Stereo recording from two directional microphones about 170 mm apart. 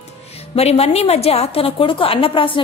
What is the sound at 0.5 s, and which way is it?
A woman's voice, 35° left (ahead or behind).